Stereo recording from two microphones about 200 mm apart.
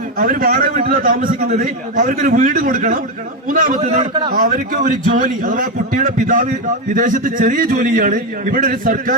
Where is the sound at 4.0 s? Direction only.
20° right (ahead or behind).